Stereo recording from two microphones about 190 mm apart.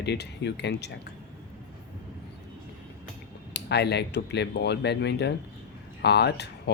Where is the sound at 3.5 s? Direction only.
60° left (ahead or behind).